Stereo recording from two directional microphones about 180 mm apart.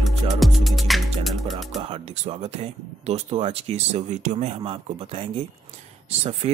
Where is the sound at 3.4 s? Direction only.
35° right (ahead or behind).